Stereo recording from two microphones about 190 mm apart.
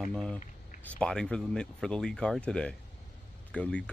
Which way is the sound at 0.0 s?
5° left (ahead or behind).